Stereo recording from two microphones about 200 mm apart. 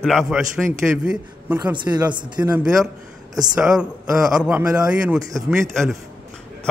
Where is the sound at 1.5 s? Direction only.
20° right (ahead or behind).